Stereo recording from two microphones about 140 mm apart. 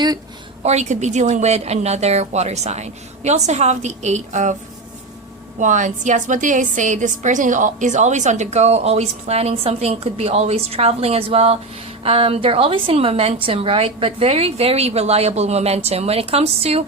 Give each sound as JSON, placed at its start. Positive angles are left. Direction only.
{"t": 0.6, "sound": "a woman's voice", "side_deg": -50}
{"t": 5.5, "sound": "a woman's voice", "side_deg": -60}